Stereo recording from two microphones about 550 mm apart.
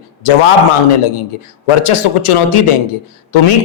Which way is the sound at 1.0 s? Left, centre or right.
Left.